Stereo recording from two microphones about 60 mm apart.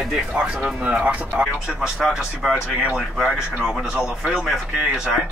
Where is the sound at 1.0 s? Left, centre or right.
Right.